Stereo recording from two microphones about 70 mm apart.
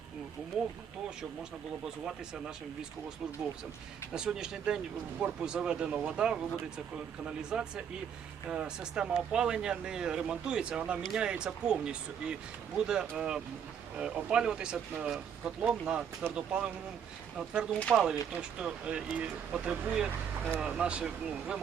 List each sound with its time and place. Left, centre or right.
4.1 s speech: centre